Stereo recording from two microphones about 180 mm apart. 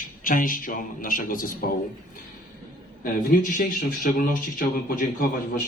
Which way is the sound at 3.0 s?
50° left (ahead or behind).